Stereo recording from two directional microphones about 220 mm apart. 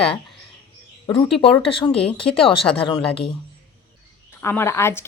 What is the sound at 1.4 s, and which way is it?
A woman's voice, 25° left (ahead or behind).